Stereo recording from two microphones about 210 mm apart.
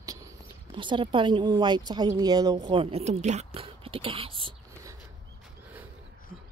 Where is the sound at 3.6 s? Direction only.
25° right (ahead or behind).